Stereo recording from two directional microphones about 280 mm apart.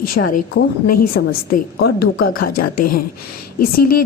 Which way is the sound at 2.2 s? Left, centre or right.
Left.